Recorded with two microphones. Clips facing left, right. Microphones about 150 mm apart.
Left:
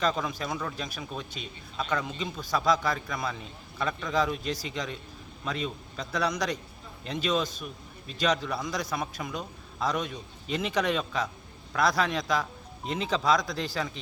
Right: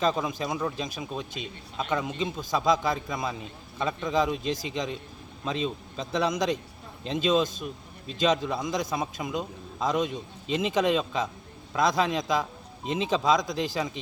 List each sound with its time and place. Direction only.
0.0 s speech: 20° right (ahead or behind)